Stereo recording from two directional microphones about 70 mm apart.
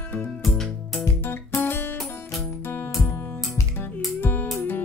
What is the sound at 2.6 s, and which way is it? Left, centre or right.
Music, left.